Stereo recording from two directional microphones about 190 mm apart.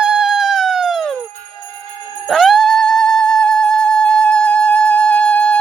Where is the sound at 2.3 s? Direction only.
Centre (ahead or behind).